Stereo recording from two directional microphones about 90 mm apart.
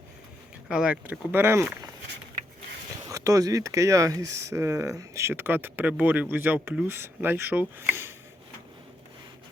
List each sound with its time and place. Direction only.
0.7 s speech: 15° right (ahead or behind)
3.1 s speech: 40° right (ahead or behind)